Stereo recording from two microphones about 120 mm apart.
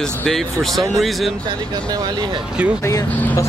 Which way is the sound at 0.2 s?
Centre (ahead or behind).